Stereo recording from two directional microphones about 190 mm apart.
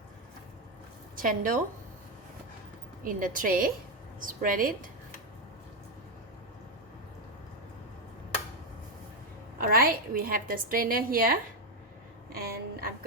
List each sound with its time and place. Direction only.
1.1 s a woman's voice: 45° right (ahead or behind)
3.0 s a woman's voice: 45° right (ahead or behind)
9.6 s a woman's voice: 50° right (ahead or behind)
12.3 s a sound: 55° right (ahead or behind)